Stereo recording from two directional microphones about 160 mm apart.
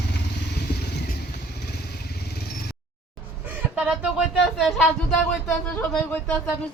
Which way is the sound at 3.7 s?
5° right (ahead or behind).